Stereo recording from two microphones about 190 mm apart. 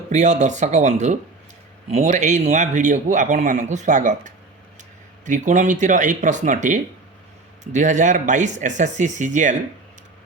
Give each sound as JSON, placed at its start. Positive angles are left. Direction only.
{"t": 0.1, "sound": "a man's voice", "side_deg": -35}